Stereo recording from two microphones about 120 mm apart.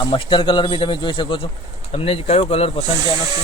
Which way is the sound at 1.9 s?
55° left (ahead or behind).